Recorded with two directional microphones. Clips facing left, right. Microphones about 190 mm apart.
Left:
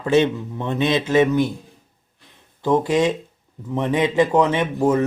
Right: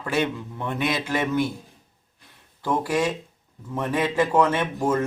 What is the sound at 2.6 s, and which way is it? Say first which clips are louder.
Speech: left 6 dB; 20° left (ahead or behind).